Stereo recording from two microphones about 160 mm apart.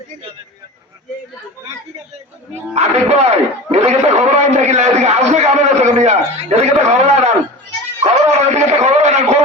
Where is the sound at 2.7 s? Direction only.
45° right (ahead or behind).